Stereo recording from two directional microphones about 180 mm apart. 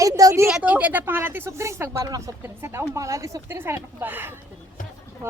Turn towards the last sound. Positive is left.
turn(degrees=-10)  # may be behind; listen again after turning